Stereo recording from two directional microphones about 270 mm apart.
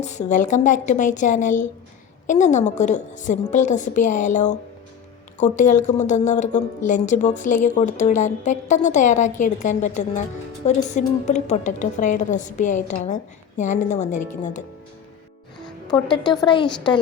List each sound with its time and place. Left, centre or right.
0.0 s a woman's voice: left
16.2 s a woman's voice: centre